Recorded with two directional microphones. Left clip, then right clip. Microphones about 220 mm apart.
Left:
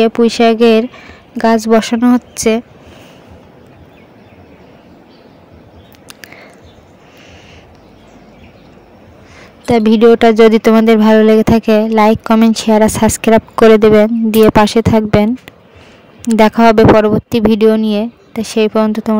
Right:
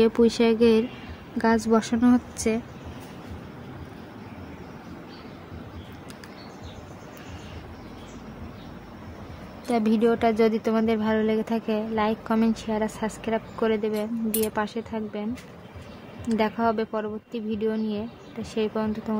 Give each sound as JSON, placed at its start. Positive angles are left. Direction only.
{"t": 0.0, "sound": "speech", "side_deg": 35}
{"t": 9.7, "sound": "speech", "side_deg": 40}
{"t": 16.3, "sound": "speech", "side_deg": 45}